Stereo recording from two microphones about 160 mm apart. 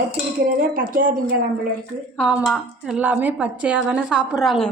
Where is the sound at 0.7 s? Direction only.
60° right (ahead or behind).